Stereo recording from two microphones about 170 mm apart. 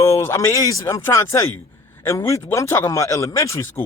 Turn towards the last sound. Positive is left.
turn(degrees=15)  # may be behind; listen again after turning